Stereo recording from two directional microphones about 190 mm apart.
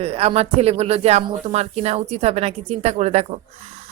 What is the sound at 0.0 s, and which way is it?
Speech, 30° right (ahead or behind).